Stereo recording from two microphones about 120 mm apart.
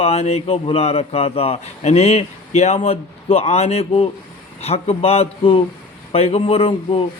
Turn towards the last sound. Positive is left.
turn(degrees=50)  # may be behind; listen again after turning